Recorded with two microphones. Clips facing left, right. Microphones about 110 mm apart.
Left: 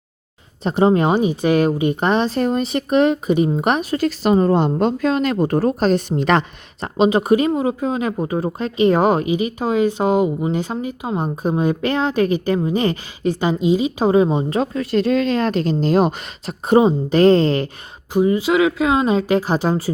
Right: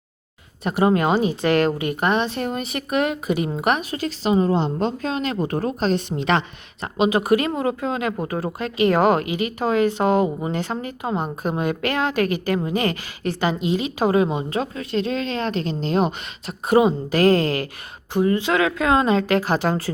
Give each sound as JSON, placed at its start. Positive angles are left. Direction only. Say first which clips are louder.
{"t": 0.6, "sound": "a woman's voice", "louder": "left 3 dB", "side_deg": 25}
{"t": 3.9, "sound": "a woman's voice", "louder": "left 4 dB", "side_deg": 45}
{"t": 7.0, "sound": "a woman's voice", "louder": "left 4 dB", "side_deg": 25}
{"t": 16.6, "sound": "a woman's voice", "louder": "left 3 dB", "side_deg": 25}
{"t": 18.1, "sound": "speech", "louder": "left 3 dB", "side_deg": 15}